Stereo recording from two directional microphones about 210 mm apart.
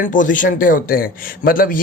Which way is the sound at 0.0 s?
40° left (ahead or behind).